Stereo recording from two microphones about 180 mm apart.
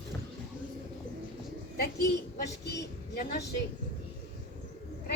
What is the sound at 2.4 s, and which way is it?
Speech, 65° left (ahead or behind).